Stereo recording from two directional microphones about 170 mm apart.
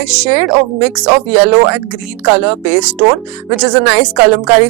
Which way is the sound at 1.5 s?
20° right (ahead or behind).